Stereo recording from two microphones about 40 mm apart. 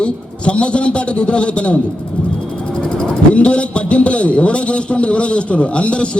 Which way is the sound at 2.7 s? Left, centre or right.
Centre.